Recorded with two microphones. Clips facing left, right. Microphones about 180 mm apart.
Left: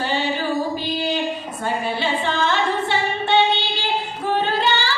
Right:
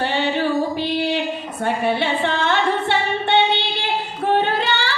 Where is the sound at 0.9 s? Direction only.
65° right (ahead or behind).